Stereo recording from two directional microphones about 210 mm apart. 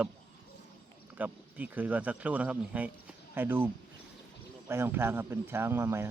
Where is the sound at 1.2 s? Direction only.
10° right (ahead or behind).